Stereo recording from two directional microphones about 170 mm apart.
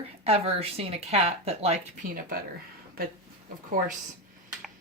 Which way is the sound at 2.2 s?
55° right (ahead or behind).